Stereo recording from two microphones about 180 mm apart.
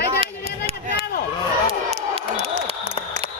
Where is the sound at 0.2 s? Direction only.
30° right (ahead or behind).